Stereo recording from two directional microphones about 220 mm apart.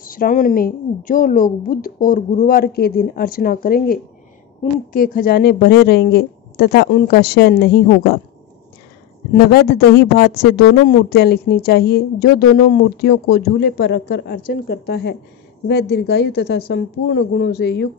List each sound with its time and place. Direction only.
0.0 s a woman's voice: 40° left (ahead or behind)
9.3 s speech: 45° left (ahead or behind)